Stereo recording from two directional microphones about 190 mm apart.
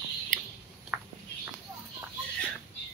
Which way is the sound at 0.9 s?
5° right (ahead or behind).